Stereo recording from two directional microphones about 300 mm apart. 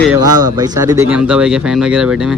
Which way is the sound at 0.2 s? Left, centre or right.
Centre.